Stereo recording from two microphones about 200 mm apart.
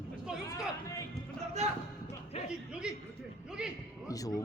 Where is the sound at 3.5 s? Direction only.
5° right (ahead or behind).